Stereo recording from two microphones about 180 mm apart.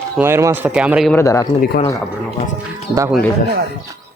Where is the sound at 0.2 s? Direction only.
15° right (ahead or behind).